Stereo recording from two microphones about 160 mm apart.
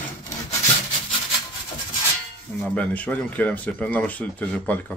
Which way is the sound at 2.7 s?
10° left (ahead or behind).